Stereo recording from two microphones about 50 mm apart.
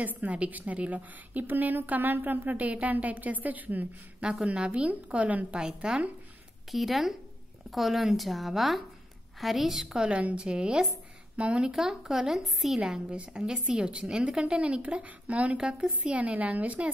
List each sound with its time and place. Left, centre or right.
0.0 s a woman's voice: right
4.5 s a woman's voice: right
5.6 s a woman's voice: centre
9.9 s a woman's voice: right
11.7 s a woman's voice: centre; by 16.9 s right